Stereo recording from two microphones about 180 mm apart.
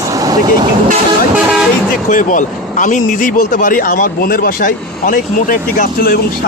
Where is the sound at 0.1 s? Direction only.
20° right (ahead or behind).